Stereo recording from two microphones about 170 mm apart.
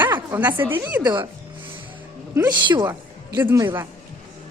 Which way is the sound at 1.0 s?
25° right (ahead or behind).